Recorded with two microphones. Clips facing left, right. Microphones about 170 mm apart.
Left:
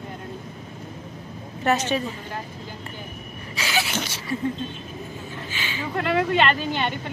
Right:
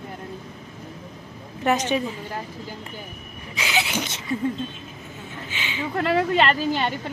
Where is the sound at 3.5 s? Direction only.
15° right (ahead or behind).